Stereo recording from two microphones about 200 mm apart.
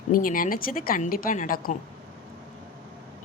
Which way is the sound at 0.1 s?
45° left (ahead or behind).